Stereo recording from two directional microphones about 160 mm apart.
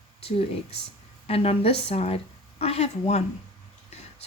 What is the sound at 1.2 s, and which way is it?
Speech, 40° left (ahead or behind).